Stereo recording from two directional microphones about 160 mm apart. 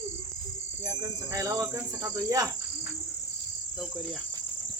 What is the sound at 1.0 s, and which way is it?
Cricket, 20° right (ahead or behind).